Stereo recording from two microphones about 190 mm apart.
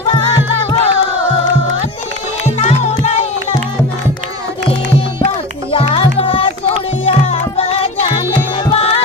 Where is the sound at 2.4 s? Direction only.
35° left (ahead or behind).